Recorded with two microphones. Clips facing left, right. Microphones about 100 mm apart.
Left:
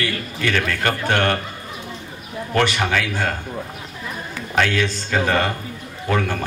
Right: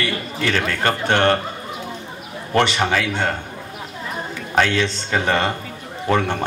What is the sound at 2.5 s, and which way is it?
Speech, 25° right (ahead or behind).